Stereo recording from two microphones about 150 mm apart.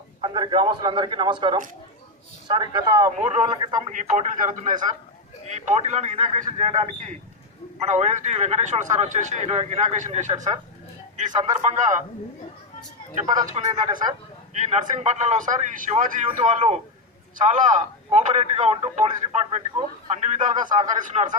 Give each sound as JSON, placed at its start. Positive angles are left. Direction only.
{"t": 0.2, "sound": "a man's voice", "side_deg": -30}
{"t": 3.8, "sound": "a man's voice", "side_deg": -55}
{"t": 13.4, "sound": "a man's voice", "side_deg": -55}